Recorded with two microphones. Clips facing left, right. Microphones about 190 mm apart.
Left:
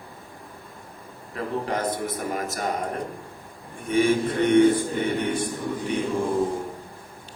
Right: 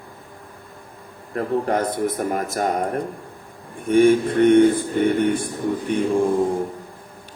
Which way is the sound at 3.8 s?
50° right (ahead or behind).